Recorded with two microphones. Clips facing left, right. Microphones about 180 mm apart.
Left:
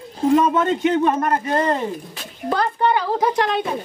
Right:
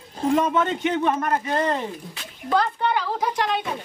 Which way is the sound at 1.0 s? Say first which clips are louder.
Left 3 dB; 40° left (ahead or behind).